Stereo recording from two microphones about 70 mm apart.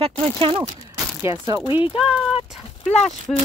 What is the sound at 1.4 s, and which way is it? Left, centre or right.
Speech, right.